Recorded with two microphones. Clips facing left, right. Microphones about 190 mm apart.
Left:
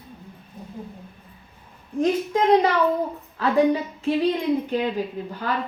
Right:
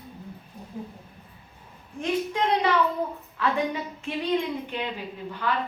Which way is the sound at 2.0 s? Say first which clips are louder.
Left 6 dB; 40° left (ahead or behind).